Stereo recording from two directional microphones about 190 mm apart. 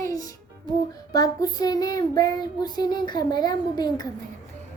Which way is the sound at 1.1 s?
20° left (ahead or behind).